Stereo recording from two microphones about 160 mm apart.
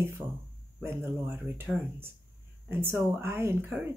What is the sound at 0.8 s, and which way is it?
Speech, 15° right (ahead or behind).